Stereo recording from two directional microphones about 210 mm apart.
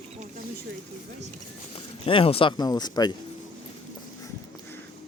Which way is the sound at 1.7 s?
25° left (ahead or behind).